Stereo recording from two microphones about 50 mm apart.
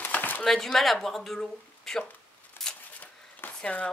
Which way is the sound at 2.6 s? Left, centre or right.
Left.